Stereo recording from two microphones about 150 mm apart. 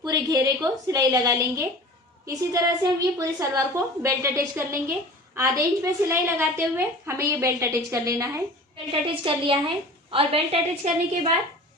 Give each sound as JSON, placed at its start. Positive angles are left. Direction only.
{"t": 0.0, "sound": "a woman's voice", "side_deg": -25}
{"t": 8.9, "sound": "a woman's voice", "side_deg": -35}